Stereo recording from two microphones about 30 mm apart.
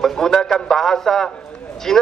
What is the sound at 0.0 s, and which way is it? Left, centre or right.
A man's voice, centre.